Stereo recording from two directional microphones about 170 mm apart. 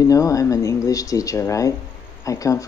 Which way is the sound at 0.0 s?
20° left (ahead or behind).